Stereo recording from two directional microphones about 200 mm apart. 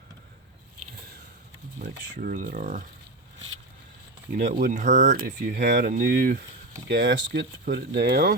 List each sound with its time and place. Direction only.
1.8 s speech: 40° right (ahead or behind)
4.4 s speech: 40° right (ahead or behind)
6.8 s speech: 60° right (ahead or behind)
7.6 s speech: 45° right (ahead or behind)